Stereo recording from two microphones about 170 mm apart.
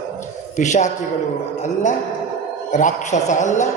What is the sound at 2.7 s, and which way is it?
Speech, 45° left (ahead or behind).